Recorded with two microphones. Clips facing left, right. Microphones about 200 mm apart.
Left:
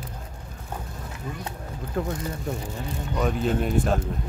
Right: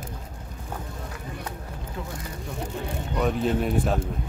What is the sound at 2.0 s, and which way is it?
Speech, 50° left (ahead or behind).